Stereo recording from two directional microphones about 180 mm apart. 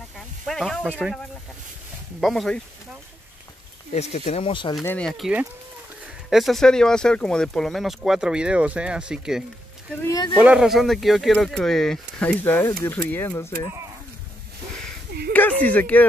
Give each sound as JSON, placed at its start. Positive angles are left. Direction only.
{"t": 0.5, "sound": "speech", "side_deg": 0}
{"t": 2.1, "sound": "speech", "side_deg": 0}
{"t": 3.9, "sound": "speech", "side_deg": 35}
{"t": 4.8, "sound": "speech", "side_deg": 5}
{"t": 10.4, "sound": "speech", "side_deg": -5}
{"t": 15.1, "sound": "a sound", "side_deg": -60}
{"t": 15.6, "sound": "speech", "side_deg": 10}